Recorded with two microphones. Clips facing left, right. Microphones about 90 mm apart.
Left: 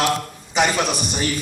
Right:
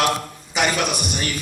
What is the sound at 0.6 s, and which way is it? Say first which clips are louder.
Speech: left 2 dB; 30° left (ahead or behind).